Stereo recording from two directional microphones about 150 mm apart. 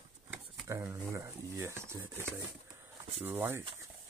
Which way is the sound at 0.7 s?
15° right (ahead or behind).